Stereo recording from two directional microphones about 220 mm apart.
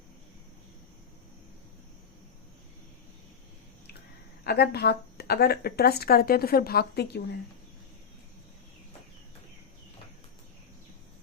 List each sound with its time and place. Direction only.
4.4 s speech: 45° left (ahead or behind)